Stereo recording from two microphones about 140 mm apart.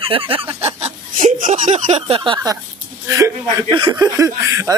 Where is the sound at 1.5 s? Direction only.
50° right (ahead or behind).